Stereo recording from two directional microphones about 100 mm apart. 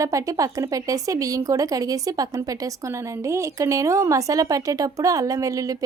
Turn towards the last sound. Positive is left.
turn(degrees=-35)  # may be behind; listen again after turning